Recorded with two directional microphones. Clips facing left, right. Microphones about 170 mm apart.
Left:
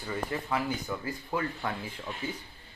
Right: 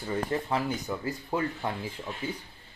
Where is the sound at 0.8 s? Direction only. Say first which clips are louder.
Right 2 dB; 25° right (ahead or behind).